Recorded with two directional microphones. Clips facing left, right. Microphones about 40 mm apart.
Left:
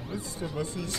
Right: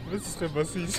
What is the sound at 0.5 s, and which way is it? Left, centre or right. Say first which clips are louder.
Speech: right 5 dB; right.